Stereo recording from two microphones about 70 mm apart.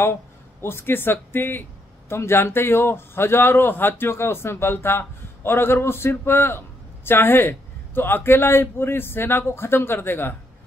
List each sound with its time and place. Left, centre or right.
0.0 s a man's voice: left